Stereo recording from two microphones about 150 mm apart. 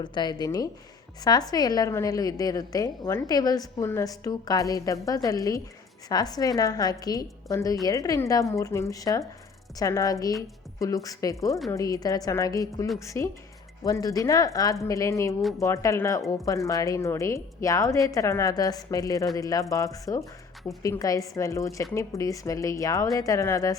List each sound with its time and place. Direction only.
0.0 s a woman's voice: 30° left (ahead or behind)
15.4 s speech: centre (ahead or behind)
15.6 s a woman's voice: 20° left (ahead or behind)